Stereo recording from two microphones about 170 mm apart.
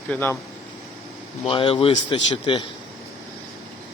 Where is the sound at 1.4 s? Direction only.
30° left (ahead or behind).